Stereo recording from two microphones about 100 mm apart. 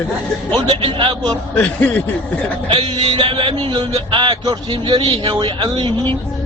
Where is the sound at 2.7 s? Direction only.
70° right (ahead or behind).